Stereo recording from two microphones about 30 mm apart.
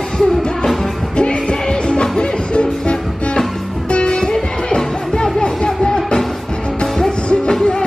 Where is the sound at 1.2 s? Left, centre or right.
Left.